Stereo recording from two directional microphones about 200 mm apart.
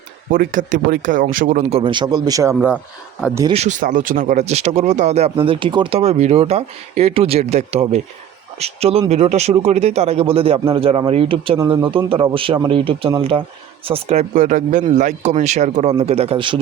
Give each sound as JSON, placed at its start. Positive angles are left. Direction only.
{"t": 0.3, "sound": "speech", "side_deg": -40}
{"t": 1.7, "sound": "a man's voice", "side_deg": -25}
{"t": 2.7, "sound": "speech", "side_deg": 0}
{"t": 3.5, "sound": "a man's voice", "side_deg": -35}